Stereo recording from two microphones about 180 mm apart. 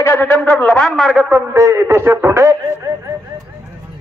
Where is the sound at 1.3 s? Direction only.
15° right (ahead or behind).